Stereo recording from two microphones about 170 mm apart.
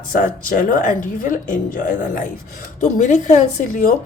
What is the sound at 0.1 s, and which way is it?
A woman's voice, 50° left (ahead or behind).